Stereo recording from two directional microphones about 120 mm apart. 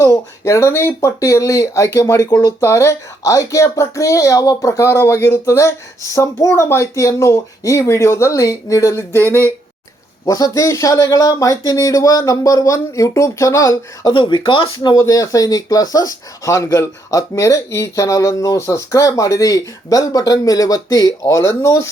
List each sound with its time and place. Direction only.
0.0 s speech: 25° left (ahead or behind)
10.2 s speech: 30° left (ahead or behind)
14.1 s speech: 40° left (ahead or behind)
14.9 s speech: 25° left (ahead or behind)